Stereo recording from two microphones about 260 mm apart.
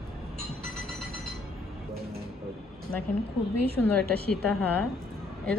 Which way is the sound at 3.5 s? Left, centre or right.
Left.